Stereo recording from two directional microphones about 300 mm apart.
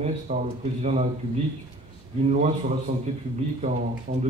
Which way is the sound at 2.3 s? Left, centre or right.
Right.